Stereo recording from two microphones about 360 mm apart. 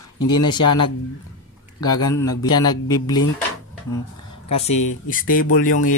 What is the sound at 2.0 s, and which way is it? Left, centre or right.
Speech, centre.